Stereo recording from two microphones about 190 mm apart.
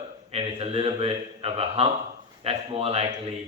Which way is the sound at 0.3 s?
30° right (ahead or behind).